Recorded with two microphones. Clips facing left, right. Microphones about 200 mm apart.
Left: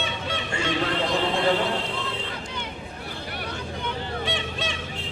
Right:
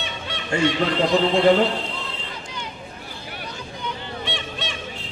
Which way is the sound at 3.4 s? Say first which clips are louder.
Left 1 dB; 60° left (ahead or behind).